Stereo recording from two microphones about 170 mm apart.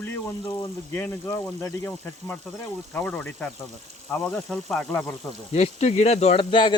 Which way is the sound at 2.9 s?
10° left (ahead or behind).